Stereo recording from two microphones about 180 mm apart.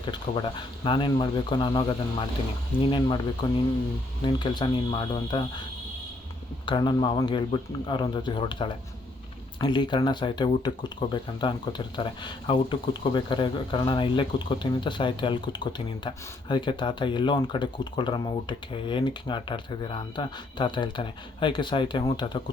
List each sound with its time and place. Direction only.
0.0 s speech: 25° left (ahead or behind)
6.7 s speech: 25° left (ahead or behind)